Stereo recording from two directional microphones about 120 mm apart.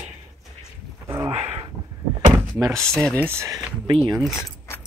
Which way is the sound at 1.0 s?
20° right (ahead or behind).